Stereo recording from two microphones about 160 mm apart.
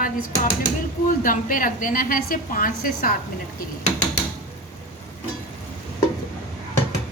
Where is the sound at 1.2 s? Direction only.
60° left (ahead or behind).